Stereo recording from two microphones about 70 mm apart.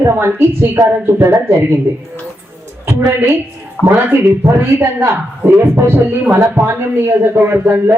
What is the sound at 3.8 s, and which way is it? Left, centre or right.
Speech, left.